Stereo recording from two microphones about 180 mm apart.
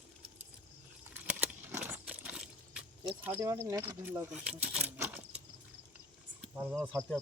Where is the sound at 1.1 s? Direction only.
10° right (ahead or behind).